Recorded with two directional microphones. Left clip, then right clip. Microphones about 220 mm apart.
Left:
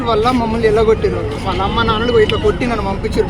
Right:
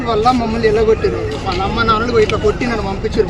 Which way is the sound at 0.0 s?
Centre (ahead or behind).